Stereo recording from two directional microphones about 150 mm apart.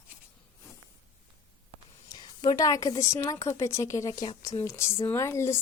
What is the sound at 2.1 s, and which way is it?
Speech, 30° left (ahead or behind).